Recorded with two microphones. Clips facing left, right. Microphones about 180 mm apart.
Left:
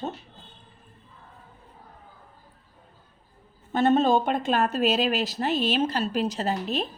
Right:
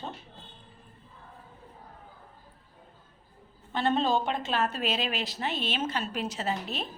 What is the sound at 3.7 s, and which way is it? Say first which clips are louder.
A woman's voice: left 6 dB; 45° left (ahead or behind).